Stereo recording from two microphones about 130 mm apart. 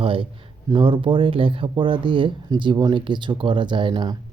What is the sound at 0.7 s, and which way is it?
Speech, 40° right (ahead or behind).